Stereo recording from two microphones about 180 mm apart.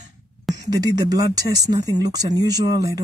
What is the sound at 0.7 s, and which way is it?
Speech, 20° right (ahead or behind).